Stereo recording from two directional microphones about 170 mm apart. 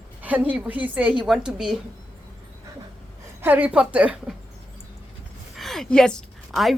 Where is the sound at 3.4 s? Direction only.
10° right (ahead or behind).